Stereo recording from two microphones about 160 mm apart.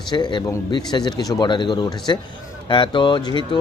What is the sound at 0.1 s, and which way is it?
Speech, 30° left (ahead or behind).